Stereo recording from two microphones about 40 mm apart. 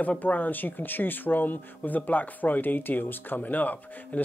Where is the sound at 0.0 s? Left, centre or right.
Left.